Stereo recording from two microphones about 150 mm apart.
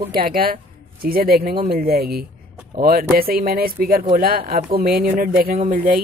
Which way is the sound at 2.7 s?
75° right (ahead or behind).